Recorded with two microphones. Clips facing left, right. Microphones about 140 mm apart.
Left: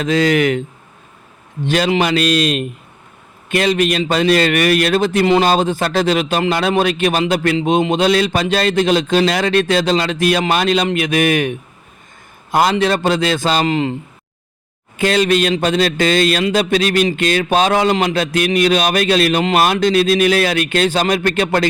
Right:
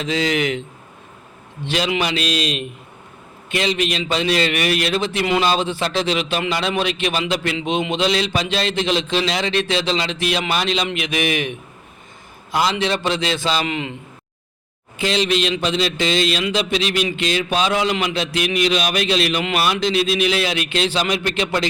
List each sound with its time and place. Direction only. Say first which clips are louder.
0.0 s a man's voice: left 6 dB; 50° left (ahead or behind)
1.6 s a man's voice: left 6 dB; 45° left (ahead or behind)
14.9 s a man's voice: left 5 dB; 50° left (ahead or behind)